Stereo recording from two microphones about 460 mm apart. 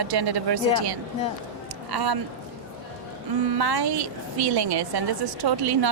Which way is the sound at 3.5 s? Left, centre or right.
Right.